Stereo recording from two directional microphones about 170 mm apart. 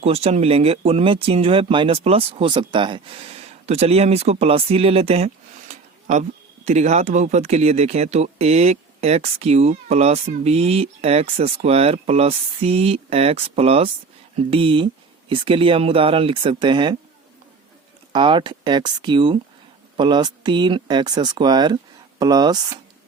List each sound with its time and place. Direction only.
0.0 s speech: 35° right (ahead or behind)
18.1 s speech: 30° right (ahead or behind)